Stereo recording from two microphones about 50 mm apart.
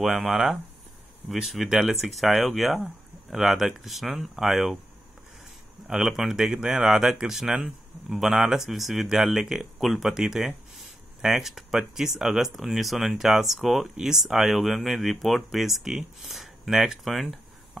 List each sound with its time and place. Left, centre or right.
0.0 s speech: centre
5.9 s speech: centre